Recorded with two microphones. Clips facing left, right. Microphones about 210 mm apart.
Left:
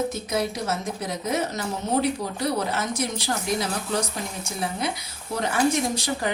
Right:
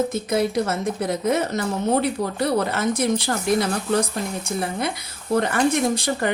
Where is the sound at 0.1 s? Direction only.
55° right (ahead or behind).